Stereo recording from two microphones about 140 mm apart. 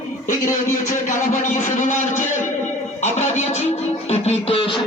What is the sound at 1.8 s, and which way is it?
A man's voice, 60° left (ahead or behind).